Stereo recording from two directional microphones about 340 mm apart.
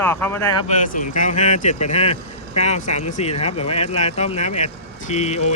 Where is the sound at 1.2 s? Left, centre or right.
Left.